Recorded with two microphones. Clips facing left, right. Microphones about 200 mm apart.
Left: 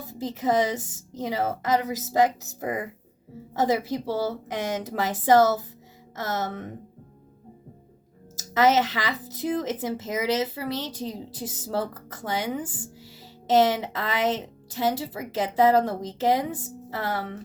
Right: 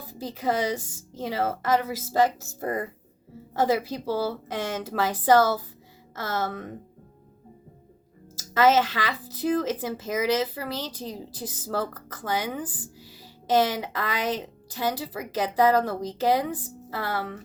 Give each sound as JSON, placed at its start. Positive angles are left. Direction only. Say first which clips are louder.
{"t": 0.1, "sound": "speech", "louder": "left 3 dB", "side_deg": 20}
{"t": 8.4, "sound": "speech", "louder": "even", "side_deg": 20}